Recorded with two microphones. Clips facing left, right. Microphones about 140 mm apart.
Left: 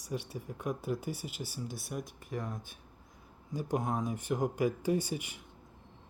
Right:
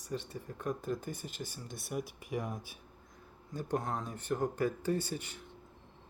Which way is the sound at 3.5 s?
10° left (ahead or behind).